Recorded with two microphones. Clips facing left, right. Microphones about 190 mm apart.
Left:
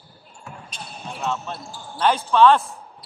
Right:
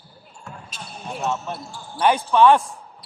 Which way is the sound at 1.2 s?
15° right (ahead or behind).